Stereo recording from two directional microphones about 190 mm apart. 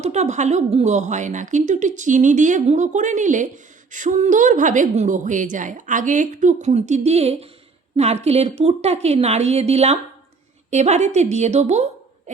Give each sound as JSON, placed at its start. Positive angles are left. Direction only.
{"t": 0.0, "sound": "a woman's voice", "side_deg": -35}